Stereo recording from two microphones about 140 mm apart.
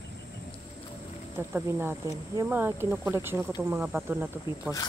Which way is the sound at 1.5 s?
15° right (ahead or behind).